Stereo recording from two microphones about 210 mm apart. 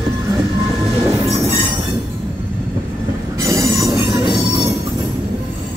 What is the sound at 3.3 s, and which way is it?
Train wheels squealing, 15° right (ahead or behind).